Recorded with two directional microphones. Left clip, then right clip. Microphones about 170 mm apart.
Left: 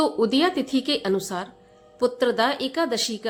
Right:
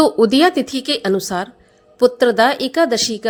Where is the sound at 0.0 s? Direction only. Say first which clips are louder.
Right 9 dB; 40° right (ahead or behind).